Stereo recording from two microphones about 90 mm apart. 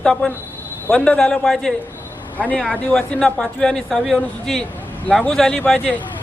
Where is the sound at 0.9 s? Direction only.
10° left (ahead or behind).